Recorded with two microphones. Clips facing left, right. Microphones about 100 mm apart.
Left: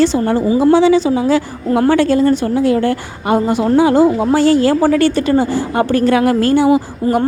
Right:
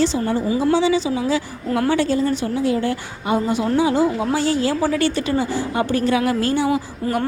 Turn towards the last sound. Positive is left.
turn(degrees=20)  # may be behind; listen again after turning